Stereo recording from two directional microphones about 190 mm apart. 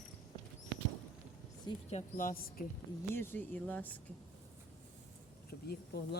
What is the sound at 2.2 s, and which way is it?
Speech, 45° left (ahead or behind).